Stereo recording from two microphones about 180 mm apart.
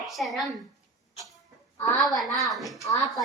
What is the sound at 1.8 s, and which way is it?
Speech, centre (ahead or behind).